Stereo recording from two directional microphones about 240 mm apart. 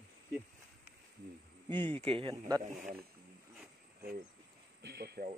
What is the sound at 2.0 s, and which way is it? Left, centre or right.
Speech, right.